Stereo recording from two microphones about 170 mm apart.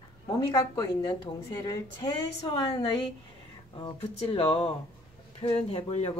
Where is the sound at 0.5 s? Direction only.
20° left (ahead or behind).